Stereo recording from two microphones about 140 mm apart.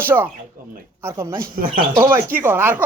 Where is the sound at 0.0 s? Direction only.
15° right (ahead or behind).